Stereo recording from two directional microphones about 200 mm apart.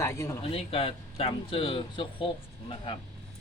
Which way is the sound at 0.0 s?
15° left (ahead or behind).